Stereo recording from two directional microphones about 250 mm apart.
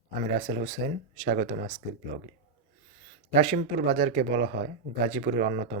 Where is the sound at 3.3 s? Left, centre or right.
Right.